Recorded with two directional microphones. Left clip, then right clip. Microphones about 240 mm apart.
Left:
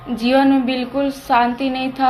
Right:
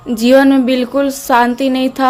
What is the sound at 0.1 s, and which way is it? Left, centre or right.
Speech, right.